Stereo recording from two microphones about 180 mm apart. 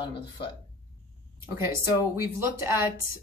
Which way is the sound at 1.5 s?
15° right (ahead or behind).